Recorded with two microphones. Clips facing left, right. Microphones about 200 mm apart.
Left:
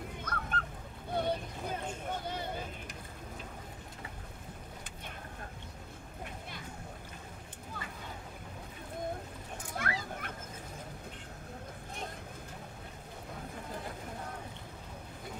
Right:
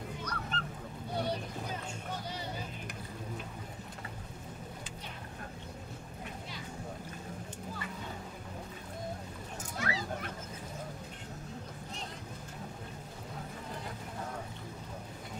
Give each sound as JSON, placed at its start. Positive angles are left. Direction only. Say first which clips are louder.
{"t": 0.2, "sound": "goose", "louder": "left 3 dB", "side_deg": 50}
{"t": 1.1, "sound": "boat", "louder": "left 2 dB", "side_deg": 55}
{"t": 2.2, "sound": "vehicle", "louder": "left 2 dB", "side_deg": 55}
{"t": 9.8, "sound": "children playing", "louder": "right 2 dB", "side_deg": 55}